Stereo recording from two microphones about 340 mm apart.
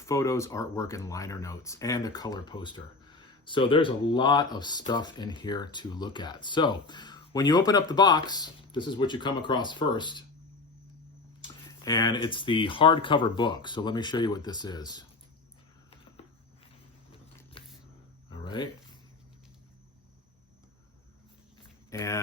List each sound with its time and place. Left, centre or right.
0.0 s speech: centre
11.8 s speech: centre
17.6 s a sound: centre
21.8 s speech: centre